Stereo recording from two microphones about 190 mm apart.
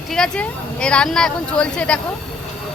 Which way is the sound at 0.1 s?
5° left (ahead or behind).